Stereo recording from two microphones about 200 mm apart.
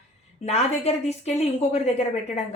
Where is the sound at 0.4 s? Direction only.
30° left (ahead or behind).